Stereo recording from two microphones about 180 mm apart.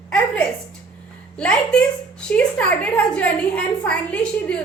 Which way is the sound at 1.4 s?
5° left (ahead or behind).